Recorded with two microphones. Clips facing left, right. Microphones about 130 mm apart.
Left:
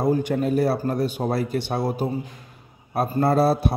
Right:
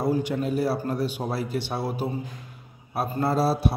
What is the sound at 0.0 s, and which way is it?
A man's voice, 50° left (ahead or behind).